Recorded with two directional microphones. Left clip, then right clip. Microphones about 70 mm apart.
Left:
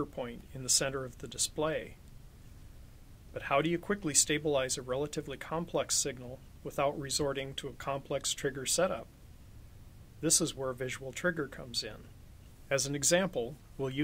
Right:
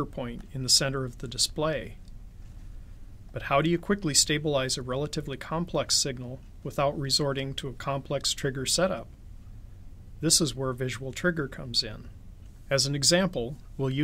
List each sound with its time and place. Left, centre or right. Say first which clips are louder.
0.0 s speech: right 4 dB; left
3.3 s speech: right 5 dB; left
10.2 s speech: right 5 dB; left